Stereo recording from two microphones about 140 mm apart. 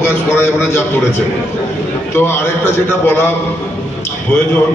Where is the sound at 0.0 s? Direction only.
15° left (ahead or behind).